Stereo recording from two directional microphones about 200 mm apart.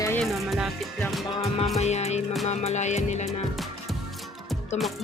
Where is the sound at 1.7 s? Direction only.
35° left (ahead or behind).